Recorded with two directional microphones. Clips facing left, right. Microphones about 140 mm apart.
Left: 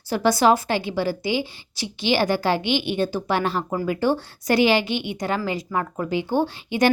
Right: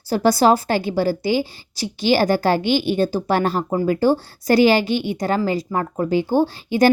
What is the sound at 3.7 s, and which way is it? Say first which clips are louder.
Speech: right 5 dB; 30° right (ahead or behind).